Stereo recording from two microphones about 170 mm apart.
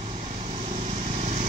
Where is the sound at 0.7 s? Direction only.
40° right (ahead or behind).